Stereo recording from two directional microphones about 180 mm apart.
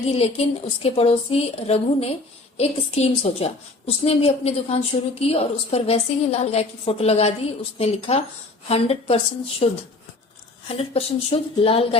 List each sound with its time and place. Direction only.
0.1 s a woman's voice: 35° left (ahead or behind)
10.7 s a woman's voice: 35° left (ahead or behind)